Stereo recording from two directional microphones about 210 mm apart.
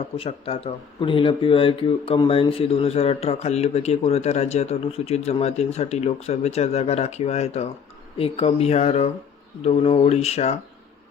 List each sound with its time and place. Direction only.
0.2 s speech: 25° left (ahead or behind)